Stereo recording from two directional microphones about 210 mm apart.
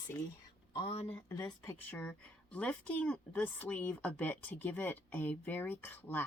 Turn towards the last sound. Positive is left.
turn(degrees=10)  # may be behind; listen again after turning